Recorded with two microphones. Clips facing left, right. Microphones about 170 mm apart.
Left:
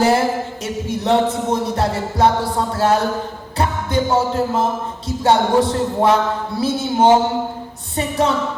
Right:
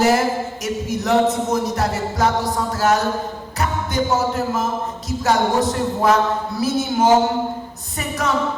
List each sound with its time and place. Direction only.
0.0 s speech: 30° left (ahead or behind)